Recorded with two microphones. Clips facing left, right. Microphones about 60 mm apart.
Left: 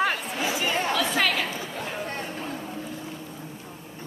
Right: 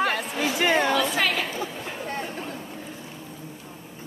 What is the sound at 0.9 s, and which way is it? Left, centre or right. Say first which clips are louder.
Chatter: right 1 dB; centre.